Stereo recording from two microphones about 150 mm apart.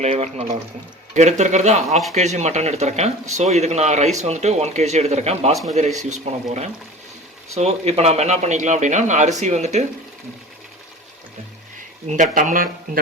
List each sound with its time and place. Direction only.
0.0 s speech: 45° right (ahead or behind)
12.0 s speech: 55° right (ahead or behind)